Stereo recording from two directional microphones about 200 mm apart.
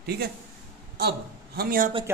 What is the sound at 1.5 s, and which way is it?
Speech, 45° right (ahead or behind).